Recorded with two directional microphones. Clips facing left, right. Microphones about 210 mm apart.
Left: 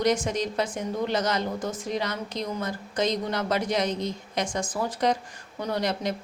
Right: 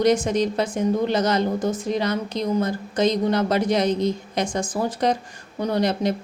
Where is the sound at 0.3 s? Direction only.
30° right (ahead or behind).